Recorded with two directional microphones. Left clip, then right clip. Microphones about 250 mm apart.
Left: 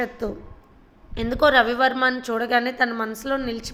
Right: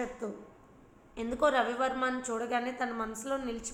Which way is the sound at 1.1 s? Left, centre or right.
Left.